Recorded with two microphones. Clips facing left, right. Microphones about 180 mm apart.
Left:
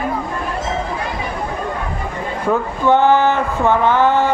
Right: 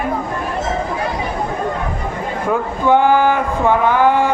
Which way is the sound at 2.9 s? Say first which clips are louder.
Even; 10° right (ahead or behind).